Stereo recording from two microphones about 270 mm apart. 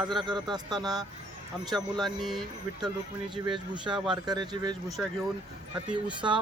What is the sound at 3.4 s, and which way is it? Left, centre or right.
Speech, centre.